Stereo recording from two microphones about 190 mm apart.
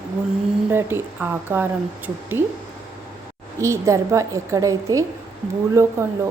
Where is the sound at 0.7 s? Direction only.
10° right (ahead or behind).